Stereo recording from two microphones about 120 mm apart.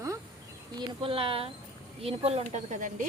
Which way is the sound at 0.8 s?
50° right (ahead or behind).